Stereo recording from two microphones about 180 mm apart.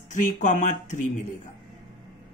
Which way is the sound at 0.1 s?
45° left (ahead or behind).